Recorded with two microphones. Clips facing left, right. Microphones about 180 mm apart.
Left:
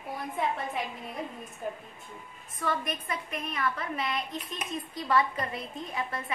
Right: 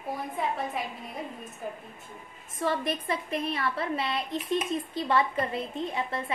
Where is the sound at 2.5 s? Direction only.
30° right (ahead or behind).